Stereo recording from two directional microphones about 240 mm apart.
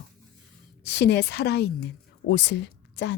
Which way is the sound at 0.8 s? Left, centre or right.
Left.